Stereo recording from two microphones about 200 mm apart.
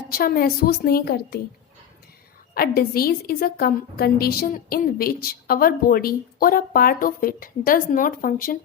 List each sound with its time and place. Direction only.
0.1 s a woman's voice: 45° left (ahead or behind)
2.6 s a woman's voice: 50° left (ahead or behind)